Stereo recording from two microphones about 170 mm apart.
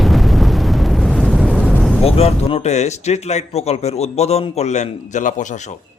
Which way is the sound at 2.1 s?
40° left (ahead or behind).